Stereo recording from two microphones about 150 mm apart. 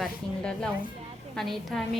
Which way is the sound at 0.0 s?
5° left (ahead or behind).